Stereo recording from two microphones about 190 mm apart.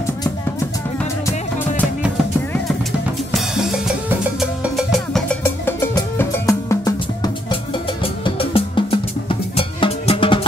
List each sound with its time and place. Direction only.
3.3 s drum kit: 5° right (ahead or behind)
4.4 s music: centre (ahead or behind)
5.4 s music: 15° left (ahead or behind)
8.0 s music: 30° left (ahead or behind)